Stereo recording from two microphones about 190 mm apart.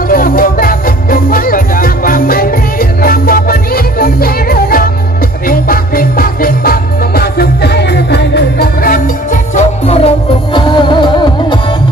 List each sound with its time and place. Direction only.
0.1 s music: 50° left (ahead or behind)
9.6 s music: 35° left (ahead or behind)